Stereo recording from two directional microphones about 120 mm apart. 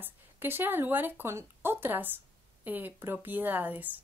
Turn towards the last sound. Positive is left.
turn(degrees=-15)  # may be behind; listen again after turning